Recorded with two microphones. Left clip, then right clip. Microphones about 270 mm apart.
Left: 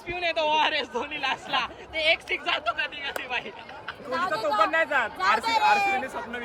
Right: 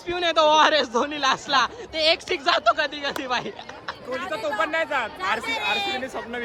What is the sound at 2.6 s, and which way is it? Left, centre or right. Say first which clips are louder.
Speech: right 7 dB; centre.